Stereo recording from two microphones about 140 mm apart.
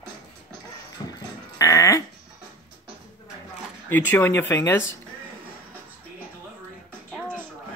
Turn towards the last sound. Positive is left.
turn(degrees=10)  # may be behind; listen again after turning